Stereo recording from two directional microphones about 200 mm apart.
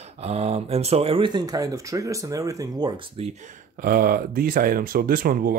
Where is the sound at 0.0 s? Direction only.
30° right (ahead or behind).